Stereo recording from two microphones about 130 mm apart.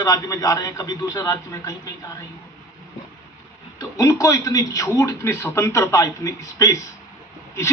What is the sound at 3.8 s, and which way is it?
A man's voice, 25° left (ahead or behind).